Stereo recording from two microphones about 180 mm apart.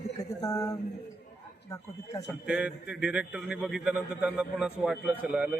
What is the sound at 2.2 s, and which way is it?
A man's voice, 5° right (ahead or behind).